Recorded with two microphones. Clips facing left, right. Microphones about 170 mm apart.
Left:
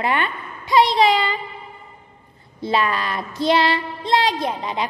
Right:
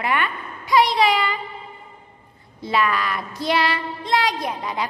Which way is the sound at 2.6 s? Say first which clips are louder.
Left 1 dB; 30° left (ahead or behind).